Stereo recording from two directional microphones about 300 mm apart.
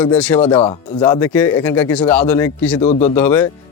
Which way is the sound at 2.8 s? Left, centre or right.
Left.